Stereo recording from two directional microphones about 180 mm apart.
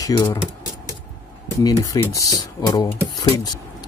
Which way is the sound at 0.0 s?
20° left (ahead or behind).